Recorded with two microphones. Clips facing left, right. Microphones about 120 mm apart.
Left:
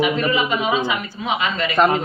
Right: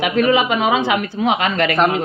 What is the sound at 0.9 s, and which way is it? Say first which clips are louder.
Speech: right 6 dB; 65° right (ahead or behind).